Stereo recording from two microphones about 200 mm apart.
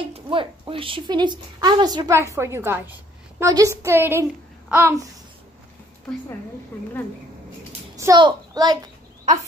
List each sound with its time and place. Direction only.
0.0 s a child's voice: 25° right (ahead or behind); by 5.1 s 10° right (ahead or behind)
7.9 s a child's voice: 20° right (ahead or behind)
9.2 s a sound: 40° right (ahead or behind)